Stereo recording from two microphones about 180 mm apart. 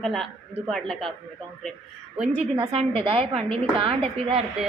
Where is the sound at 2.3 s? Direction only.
35° right (ahead or behind).